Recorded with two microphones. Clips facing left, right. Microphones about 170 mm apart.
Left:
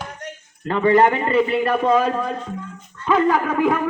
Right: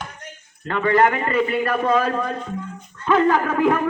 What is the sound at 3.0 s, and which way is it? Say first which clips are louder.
Speech: even; 5° left (ahead or behind).